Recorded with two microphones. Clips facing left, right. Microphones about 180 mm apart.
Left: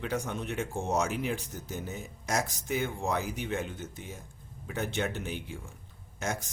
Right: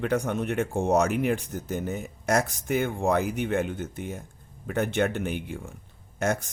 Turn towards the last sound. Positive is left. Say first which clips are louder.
# right 8 dB
turn(degrees=-60)  # may be behind; listen again after turning